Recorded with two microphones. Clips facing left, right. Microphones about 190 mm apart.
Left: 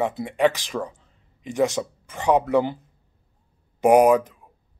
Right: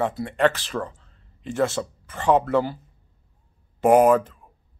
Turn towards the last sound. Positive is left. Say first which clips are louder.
# even
turn(degrees=15)  # may be behind; listen again after turning